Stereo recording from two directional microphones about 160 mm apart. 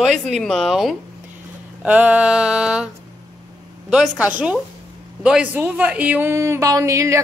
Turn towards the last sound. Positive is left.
turn(degrees=-20)  # may be behind; listen again after turning